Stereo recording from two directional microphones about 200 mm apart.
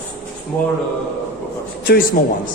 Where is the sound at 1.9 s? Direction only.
45° left (ahead or behind).